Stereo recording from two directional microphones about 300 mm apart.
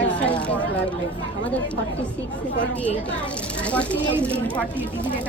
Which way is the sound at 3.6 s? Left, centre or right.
Centre.